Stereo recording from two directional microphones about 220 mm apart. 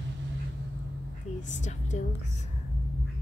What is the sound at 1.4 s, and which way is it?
Speech, 35° left (ahead or behind).